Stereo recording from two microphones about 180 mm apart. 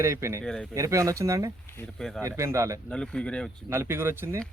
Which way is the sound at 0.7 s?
15° right (ahead or behind).